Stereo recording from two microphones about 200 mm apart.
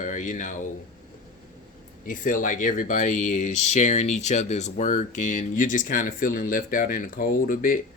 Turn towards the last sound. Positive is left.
turn(degrees=45)  # may be behind; listen again after turning